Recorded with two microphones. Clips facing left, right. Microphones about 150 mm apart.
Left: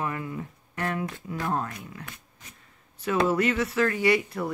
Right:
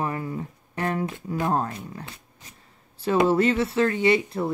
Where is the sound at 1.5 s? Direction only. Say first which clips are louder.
Right 4 dB; 35° right (ahead or behind).